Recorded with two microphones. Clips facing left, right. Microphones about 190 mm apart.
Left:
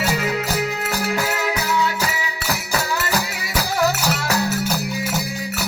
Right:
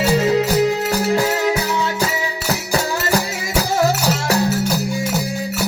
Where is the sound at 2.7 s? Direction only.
30° right (ahead or behind).